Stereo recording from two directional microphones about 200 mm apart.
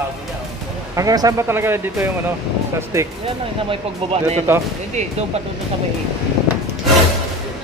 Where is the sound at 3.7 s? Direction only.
30° right (ahead or behind).